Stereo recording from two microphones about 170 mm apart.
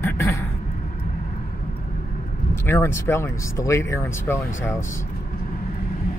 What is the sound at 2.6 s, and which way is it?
Speech, 15° left (ahead or behind).